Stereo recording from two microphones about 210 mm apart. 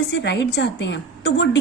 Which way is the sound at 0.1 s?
55° left (ahead or behind).